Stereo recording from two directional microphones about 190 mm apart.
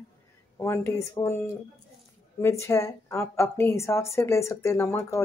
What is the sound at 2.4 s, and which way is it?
A woman's voice, 15° left (ahead or behind).